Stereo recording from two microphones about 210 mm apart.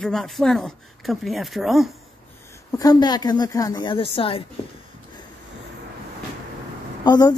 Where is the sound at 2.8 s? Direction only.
20° left (ahead or behind).